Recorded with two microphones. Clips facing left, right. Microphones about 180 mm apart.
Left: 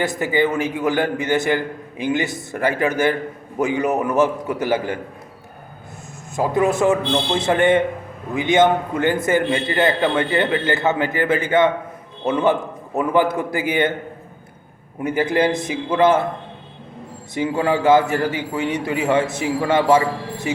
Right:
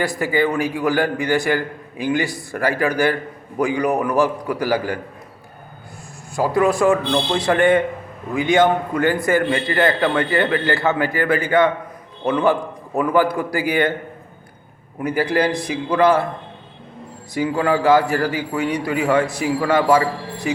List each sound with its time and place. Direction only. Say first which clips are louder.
0.0 s a man's voice: even; 20° left (ahead or behind)
6.3 s a man's voice: right 1 dB; 20° left (ahead or behind)
15.0 s a man's voice: left 1 dB; 20° left (ahead or behind)
17.3 s a man's voice: right 1 dB; 20° left (ahead or behind)